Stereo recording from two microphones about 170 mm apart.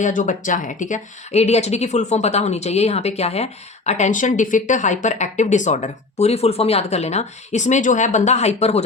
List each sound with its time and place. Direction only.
0.0 s speech: 50° left (ahead or behind)